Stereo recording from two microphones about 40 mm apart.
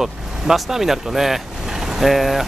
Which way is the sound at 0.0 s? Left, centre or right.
Centre.